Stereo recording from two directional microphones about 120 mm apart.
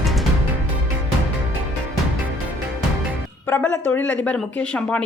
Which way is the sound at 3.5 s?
10° left (ahead or behind).